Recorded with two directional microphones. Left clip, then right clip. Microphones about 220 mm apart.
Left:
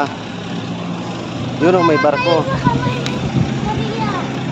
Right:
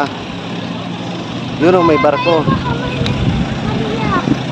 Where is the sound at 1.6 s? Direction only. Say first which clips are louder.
Right 2 dB; 10° right (ahead or behind).